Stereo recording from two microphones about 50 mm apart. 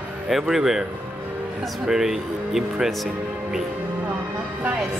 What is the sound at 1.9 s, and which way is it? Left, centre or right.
Speech, centre.